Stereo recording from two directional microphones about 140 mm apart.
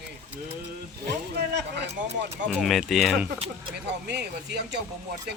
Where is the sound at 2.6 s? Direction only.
Centre (ahead or behind).